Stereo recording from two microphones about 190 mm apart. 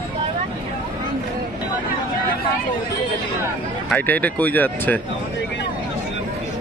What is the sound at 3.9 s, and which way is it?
Speech, 10° left (ahead or behind).